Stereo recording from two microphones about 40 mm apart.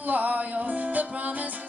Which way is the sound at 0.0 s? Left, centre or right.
Right.